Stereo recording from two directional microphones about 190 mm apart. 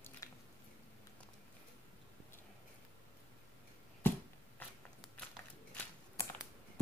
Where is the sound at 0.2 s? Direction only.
15° left (ahead or behind).